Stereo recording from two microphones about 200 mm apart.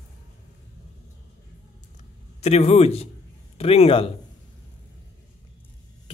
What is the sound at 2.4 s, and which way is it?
A man's voice, 30° left (ahead or behind).